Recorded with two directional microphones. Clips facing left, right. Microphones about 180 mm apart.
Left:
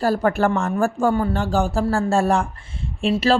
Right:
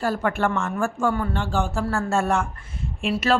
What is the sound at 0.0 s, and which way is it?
Speech, 35° left (ahead or behind).